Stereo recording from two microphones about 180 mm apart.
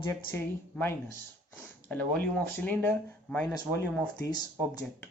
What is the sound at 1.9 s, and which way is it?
Speech, 60° right (ahead or behind).